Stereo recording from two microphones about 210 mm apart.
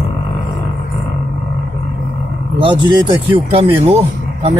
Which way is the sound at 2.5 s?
20° right (ahead or behind).